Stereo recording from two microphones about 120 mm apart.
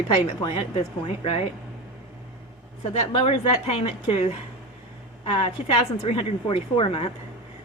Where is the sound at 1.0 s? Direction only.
50° left (ahead or behind).